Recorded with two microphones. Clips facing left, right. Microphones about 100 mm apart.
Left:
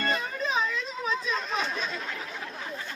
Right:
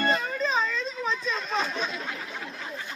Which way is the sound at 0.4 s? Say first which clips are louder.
Even; 10° left (ahead or behind).